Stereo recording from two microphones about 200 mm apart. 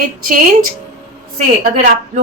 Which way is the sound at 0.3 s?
45° right (ahead or behind).